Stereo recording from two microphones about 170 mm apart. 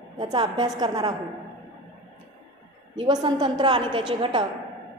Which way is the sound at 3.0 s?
25° right (ahead or behind).